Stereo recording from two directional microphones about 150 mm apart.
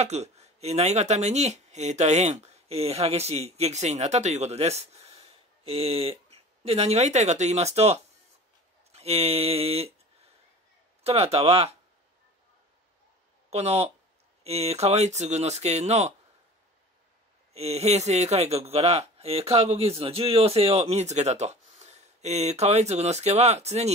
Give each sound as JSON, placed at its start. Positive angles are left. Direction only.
{"t": 0.0, "sound": "a man's voice", "side_deg": -45}
{"t": 11.1, "sound": "speech", "side_deg": -40}
{"t": 13.5, "sound": "a man's voice", "side_deg": -45}
{"t": 17.6, "sound": "a man's voice", "side_deg": -45}